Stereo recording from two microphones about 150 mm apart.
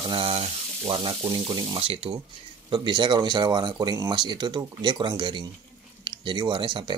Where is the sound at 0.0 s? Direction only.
35° right (ahead or behind).